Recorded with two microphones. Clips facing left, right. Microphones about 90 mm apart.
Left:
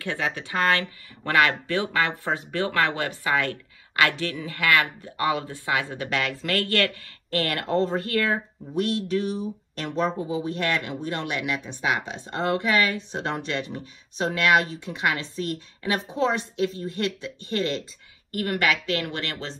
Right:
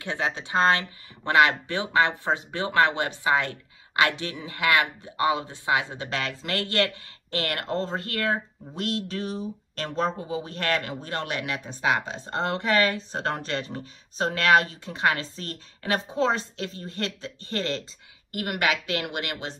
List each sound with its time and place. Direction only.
0.0 s speech: 20° right (ahead or behind)
9.0 s speech: 35° right (ahead or behind)
19.0 s speech: 20° right (ahead or behind)